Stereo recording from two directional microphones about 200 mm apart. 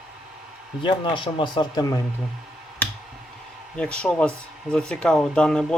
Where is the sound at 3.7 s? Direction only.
5° left (ahead or behind).